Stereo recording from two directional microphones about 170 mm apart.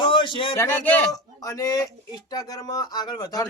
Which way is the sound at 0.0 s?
30° left (ahead or behind).